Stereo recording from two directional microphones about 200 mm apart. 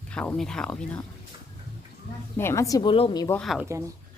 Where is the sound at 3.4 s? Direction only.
Centre (ahead or behind).